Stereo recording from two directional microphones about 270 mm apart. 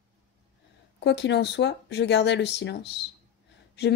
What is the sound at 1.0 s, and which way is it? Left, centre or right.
Speech, left.